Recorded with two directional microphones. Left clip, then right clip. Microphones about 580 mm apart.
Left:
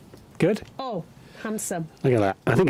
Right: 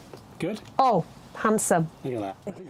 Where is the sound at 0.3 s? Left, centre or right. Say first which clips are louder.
Left 9 dB; left.